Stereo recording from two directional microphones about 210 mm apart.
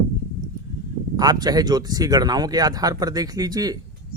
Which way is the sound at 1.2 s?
20° right (ahead or behind).